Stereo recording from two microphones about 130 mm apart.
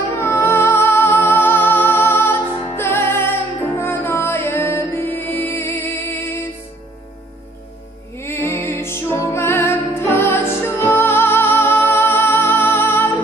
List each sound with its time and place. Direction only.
0.1 s music: 15° left (ahead or behind)
8.2 s music: 20° left (ahead or behind)